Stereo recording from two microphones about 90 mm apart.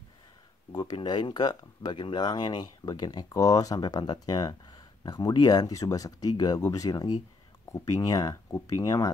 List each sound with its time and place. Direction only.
0.7 s speech: 45° left (ahead or behind)
0.9 s speech: 55° left (ahead or behind)